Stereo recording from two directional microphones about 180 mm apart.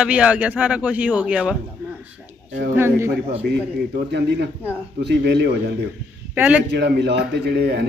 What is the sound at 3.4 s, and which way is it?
Speech, 65° right (ahead or behind).